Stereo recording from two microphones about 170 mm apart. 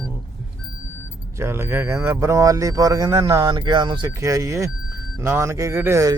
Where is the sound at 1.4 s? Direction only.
15° right (ahead or behind).